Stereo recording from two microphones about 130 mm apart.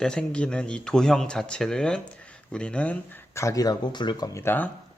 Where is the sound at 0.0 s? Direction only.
5° left (ahead or behind); by 4.3 s 35° left (ahead or behind).